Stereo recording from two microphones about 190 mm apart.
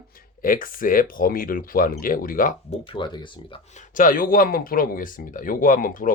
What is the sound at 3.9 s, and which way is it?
Speech, 45° left (ahead or behind).